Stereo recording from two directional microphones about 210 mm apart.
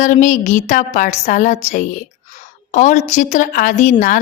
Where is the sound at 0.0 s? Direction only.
35° left (ahead or behind).